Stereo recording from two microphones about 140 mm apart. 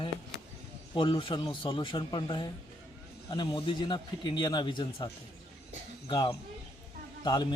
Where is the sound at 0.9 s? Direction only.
35° left (ahead or behind).